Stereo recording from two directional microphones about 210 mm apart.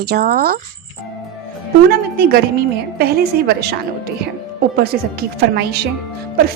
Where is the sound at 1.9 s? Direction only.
45° right (ahead or behind).